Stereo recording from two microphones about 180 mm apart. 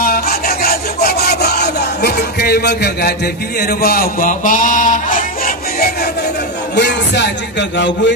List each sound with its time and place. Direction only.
0.0 s filing: 55° left (ahead or behind)
3.6 s speech: 60° left (ahead or behind)
6.7 s music: 70° left (ahead or behind)
7.7 s a man's voice: 75° left (ahead or behind)